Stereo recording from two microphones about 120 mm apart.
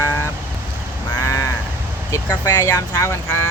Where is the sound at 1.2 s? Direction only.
25° left (ahead or behind).